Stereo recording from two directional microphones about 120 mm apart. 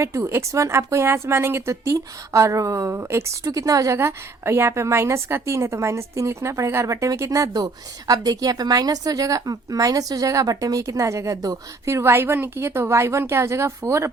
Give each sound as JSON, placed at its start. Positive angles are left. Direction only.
{"t": 0.0, "sound": "speech", "side_deg": -25}